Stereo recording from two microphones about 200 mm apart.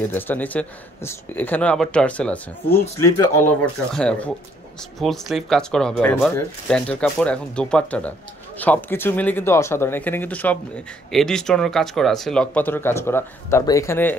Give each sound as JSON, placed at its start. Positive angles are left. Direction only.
{"t": 0.0, "sound": "speech", "side_deg": 10}
{"t": 3.9, "sound": "speech", "side_deg": 5}